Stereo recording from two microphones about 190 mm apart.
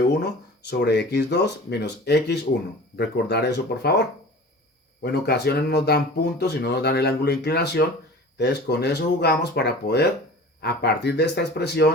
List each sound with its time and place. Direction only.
0.7 s speech: 60° left (ahead or behind)
5.0 s speech: 60° left (ahead or behind)